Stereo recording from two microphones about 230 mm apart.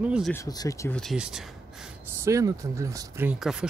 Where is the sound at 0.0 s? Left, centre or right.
Centre.